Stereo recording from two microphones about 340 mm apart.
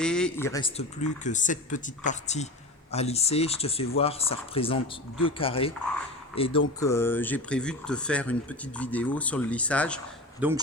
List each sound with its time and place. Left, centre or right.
0.0 s speech: centre